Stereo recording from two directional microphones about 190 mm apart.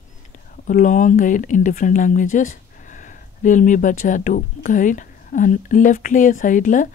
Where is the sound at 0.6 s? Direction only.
45° left (ahead or behind).